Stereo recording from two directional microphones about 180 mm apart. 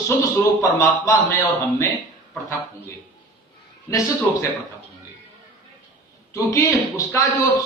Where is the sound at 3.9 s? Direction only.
15° left (ahead or behind).